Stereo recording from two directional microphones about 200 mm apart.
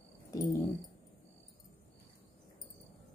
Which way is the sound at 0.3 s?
15° left (ahead or behind).